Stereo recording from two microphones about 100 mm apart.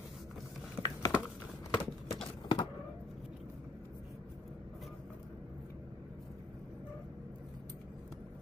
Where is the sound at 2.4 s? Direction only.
50° left (ahead or behind).